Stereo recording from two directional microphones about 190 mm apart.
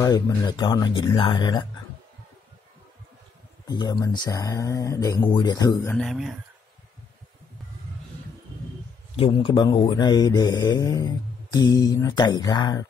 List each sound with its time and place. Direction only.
0.0 s speech: 20° left (ahead or behind)
3.6 s speech: 20° left (ahead or behind)
5.9 s speech: centre (ahead or behind)
9.1 s speech: 30° left (ahead or behind)